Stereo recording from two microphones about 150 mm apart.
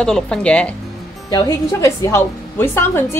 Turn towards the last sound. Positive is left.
turn(degrees=15)  # may be behind; listen again after turning